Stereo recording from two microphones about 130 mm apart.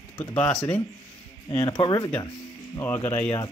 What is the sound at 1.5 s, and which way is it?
Speech, 30° left (ahead or behind).